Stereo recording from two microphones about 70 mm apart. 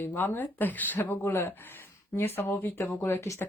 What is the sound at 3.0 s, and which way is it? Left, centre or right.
Speech, left.